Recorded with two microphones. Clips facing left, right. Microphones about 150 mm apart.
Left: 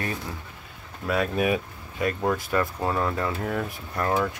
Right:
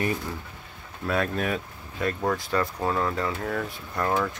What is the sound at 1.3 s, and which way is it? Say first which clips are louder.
Speech: left 4 dB; 15° left (ahead or behind).